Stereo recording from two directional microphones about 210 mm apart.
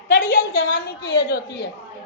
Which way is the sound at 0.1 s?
45° left (ahead or behind).